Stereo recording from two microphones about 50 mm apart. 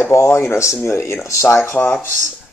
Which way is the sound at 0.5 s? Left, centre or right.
Left.